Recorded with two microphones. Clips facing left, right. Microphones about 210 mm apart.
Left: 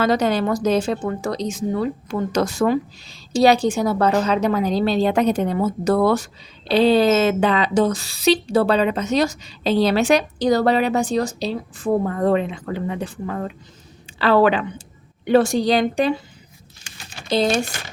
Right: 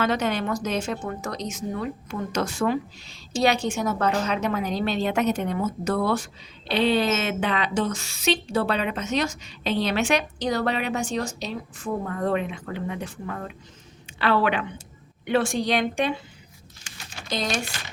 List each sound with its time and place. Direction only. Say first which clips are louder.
0.0 s a woman's voice: left 6 dB; 35° left (ahead or behind)
16.8 s typing: left 2 dB; 30° left (ahead or behind)